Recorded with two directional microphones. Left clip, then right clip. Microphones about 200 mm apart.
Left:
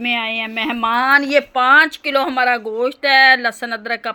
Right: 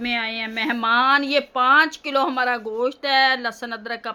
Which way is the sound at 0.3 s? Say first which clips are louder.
Left 4 dB; 10° left (ahead or behind).